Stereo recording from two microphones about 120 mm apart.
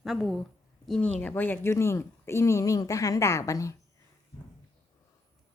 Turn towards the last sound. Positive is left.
turn(degrees=25)  # may be behind; listen again after turning